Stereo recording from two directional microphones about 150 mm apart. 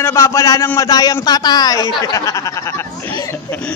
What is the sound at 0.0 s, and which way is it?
A man's voice, 20° left (ahead or behind).